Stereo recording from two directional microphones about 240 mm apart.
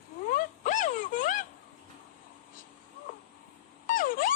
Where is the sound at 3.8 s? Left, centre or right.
Left.